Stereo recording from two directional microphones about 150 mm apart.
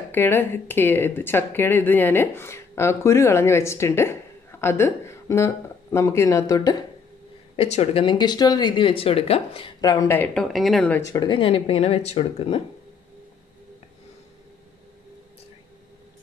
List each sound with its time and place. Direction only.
0.1 s speech: 15° left (ahead or behind)
7.5 s speech: 45° left (ahead or behind); by 11.0 s 5° left (ahead or behind)
11.0 s speech: 25° left (ahead or behind); by 12.6 s 40° left (ahead or behind)